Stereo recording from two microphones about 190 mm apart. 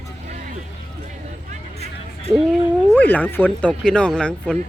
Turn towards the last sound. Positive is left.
turn(degrees=5)  # may be behind; listen again after turning